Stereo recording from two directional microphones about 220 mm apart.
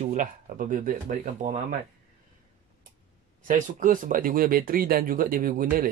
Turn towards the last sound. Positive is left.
turn(degrees=-40)  # may be behind; listen again after turning